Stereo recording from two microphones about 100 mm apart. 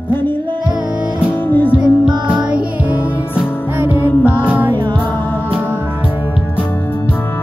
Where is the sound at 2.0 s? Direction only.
10° right (ahead or behind).